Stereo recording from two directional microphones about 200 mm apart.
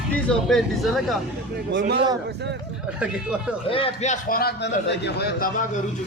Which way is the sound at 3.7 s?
30° left (ahead or behind).